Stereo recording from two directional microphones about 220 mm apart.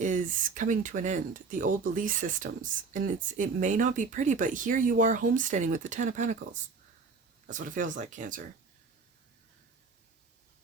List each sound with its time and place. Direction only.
0.0 s speech: 35° right (ahead or behind)